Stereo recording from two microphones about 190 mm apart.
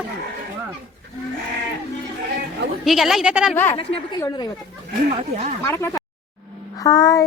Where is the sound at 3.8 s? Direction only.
30° left (ahead or behind).